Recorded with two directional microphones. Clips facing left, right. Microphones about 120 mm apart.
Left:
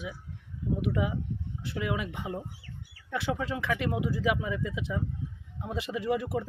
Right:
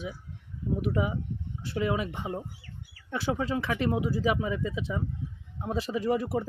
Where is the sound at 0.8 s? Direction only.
35° right (ahead or behind).